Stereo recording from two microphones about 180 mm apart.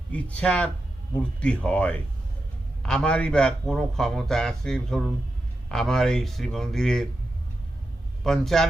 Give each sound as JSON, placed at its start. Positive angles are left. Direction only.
{"t": 0.1, "sound": "a man's voice", "side_deg": 5}
{"t": 8.2, "sound": "a man's voice", "side_deg": 0}